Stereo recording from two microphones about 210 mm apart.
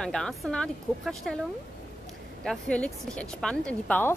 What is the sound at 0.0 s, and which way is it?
A woman's voice, 5° left (ahead or behind).